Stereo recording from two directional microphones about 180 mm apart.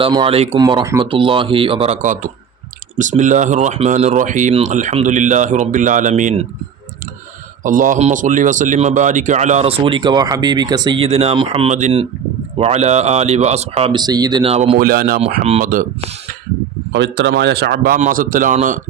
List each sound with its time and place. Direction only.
0.0 s speech: 25° right (ahead or behind); by 6.4 s 45° right (ahead or behind)
7.6 s speech: 45° right (ahead or behind)
14.8 s a man's voice: 55° right (ahead or behind)
16.9 s a man's voice: 80° right; by 18.8 s 45° right (ahead or behind)